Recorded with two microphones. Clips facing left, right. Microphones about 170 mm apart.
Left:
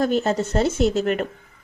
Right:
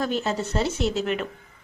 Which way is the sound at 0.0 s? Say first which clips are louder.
Left 5 dB; 45° left (ahead or behind).